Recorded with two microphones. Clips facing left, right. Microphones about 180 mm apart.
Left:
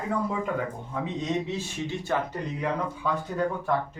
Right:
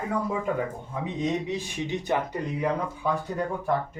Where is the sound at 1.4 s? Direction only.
15° right (ahead or behind).